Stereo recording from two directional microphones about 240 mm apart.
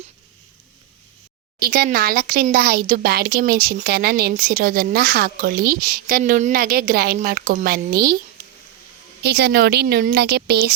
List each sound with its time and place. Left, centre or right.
1.5 s speech: right
9.2 s speech: right